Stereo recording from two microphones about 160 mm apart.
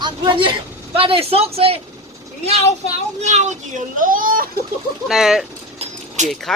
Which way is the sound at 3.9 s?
60° right (ahead or behind).